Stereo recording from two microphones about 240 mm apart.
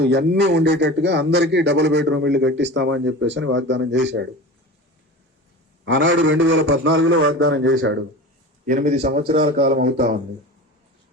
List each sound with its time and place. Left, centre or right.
0.0 s speech: right
5.8 s speech: right
8.6 s speech: right
9.6 s speech: right